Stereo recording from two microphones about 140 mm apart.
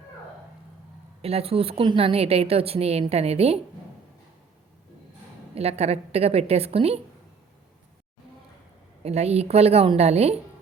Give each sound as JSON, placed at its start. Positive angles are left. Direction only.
{"t": 1.2, "sound": "a woman's voice", "side_deg": -45}
{"t": 5.5, "sound": "a woman's voice", "side_deg": -45}
{"t": 9.0, "sound": "a woman's voice", "side_deg": -50}